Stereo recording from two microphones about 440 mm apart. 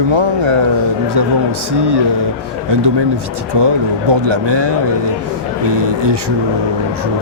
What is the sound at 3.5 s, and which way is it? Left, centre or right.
Speech, right.